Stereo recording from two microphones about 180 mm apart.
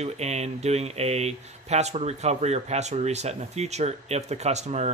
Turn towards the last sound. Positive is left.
turn(degrees=-40)  # may be behind; listen again after turning